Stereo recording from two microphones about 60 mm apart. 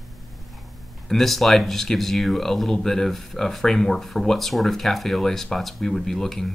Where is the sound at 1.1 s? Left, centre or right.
Centre.